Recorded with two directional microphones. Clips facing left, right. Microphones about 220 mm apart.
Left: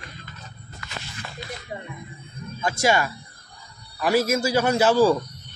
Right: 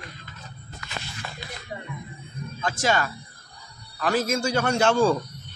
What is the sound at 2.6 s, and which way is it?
Speech, 10° left (ahead or behind).